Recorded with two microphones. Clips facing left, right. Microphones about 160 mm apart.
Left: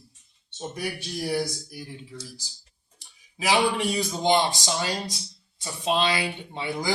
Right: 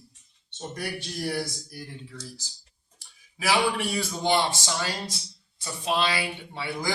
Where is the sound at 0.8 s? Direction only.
5° left (ahead or behind).